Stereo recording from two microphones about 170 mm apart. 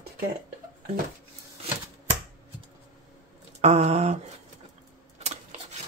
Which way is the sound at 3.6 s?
40° right (ahead or behind).